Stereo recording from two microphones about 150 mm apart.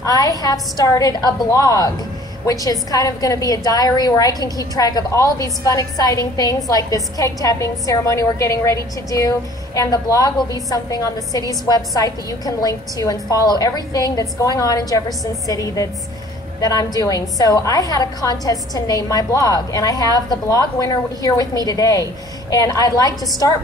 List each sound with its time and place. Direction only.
0.0 s a woman's voice: 25° left (ahead or behind)